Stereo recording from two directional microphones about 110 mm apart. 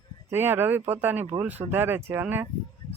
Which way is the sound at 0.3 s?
20° right (ahead or behind).